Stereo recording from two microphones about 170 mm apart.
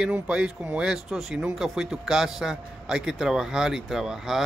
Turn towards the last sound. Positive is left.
turn(degrees=0)  # may be behind; listen again after turning